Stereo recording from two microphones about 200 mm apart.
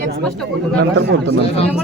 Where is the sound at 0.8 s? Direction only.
60° right (ahead or behind).